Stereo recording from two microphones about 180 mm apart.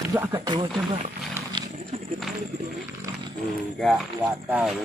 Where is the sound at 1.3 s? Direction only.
20° right (ahead or behind).